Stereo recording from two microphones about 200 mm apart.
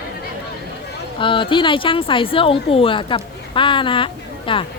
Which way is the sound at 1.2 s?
25° left (ahead or behind).